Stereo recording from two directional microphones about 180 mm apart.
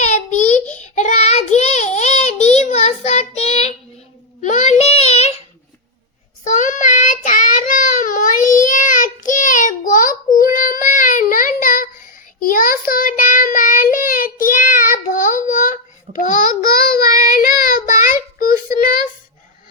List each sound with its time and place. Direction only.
0.0 s child singing: 40° left (ahead or behind)
6.4 s child singing: 45° left (ahead or behind)
18.8 s a sound: 50° left (ahead or behind)